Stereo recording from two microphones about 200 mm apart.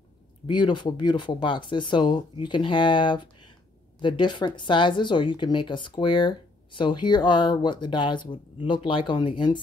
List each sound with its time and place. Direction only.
0.5 s speech: 25° left (ahead or behind)